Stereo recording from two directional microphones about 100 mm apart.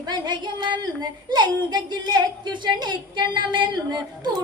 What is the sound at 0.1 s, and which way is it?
A woman's voice, 45° right (ahead or behind).